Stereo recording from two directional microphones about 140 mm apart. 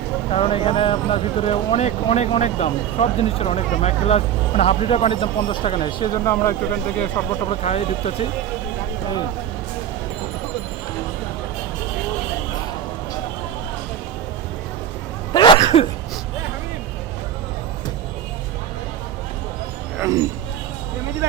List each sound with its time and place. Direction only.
0.3 s speech: 45° left (ahead or behind)
6.2 s speech: 20° left (ahead or behind)
7.6 s speech: 50° left (ahead or behind)
15.3 s cough: 35° left (ahead or behind)
15.6 s a sound: 45° left (ahead or behind)
20.0 s a sound: 20° right (ahead or behind)